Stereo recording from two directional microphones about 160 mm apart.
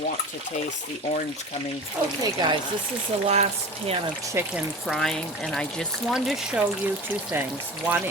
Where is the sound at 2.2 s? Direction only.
25° right (ahead or behind).